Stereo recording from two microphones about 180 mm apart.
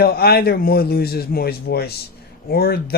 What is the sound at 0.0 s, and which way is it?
Speech, 60° left (ahead or behind).